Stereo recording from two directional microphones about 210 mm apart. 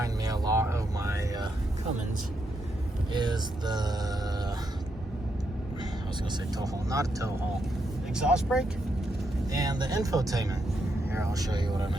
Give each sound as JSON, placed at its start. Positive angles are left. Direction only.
{"t": 0.0, "sound": "music", "side_deg": -15}
{"t": 3.1, "sound": "speech", "side_deg": -20}
{"t": 6.3, "sound": "speech", "side_deg": -15}
{"t": 8.1, "sound": "speech", "side_deg": -5}
{"t": 9.5, "sound": "speech", "side_deg": -15}